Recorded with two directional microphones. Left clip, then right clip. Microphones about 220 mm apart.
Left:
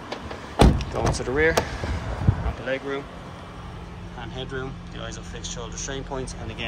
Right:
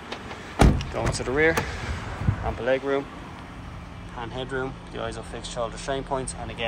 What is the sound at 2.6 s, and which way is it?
Speech, centre (ahead or behind).